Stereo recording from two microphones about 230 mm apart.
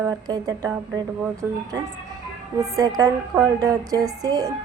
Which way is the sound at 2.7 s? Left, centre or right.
Centre.